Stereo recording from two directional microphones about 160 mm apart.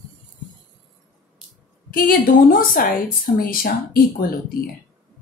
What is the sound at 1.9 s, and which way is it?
A woman's voice, 65° left (ahead or behind).